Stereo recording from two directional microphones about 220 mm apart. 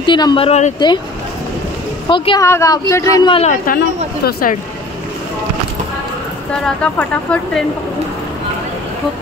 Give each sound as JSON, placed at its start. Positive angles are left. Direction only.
{"t": 0.0, "sound": "speech", "side_deg": 20}
{"t": 2.0, "sound": "speech", "side_deg": 20}
{"t": 3.6, "sound": "a woman's voice", "side_deg": 45}
{"t": 6.5, "sound": "speech", "side_deg": 5}